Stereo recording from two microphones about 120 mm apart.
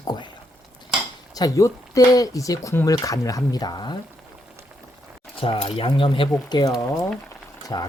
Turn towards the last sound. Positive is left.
turn(degrees=35)  # may be behind; listen again after turning